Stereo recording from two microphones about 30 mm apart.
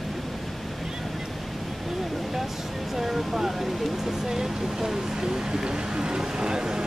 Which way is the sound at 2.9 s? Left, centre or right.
Centre.